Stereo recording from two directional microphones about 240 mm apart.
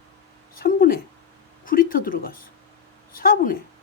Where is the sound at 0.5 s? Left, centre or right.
Left.